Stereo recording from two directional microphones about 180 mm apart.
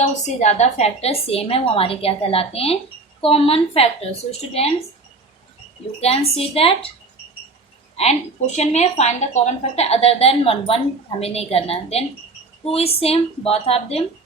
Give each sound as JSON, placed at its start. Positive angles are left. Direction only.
{"t": 0.0, "sound": "a woman's voice", "side_deg": 40}
{"t": 6.0, "sound": "a woman's voice", "side_deg": 35}
{"t": 8.5, "sound": "a woman's voice", "side_deg": 35}